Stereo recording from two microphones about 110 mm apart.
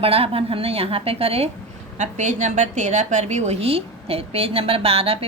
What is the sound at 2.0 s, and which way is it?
A woman's voice, 90° right.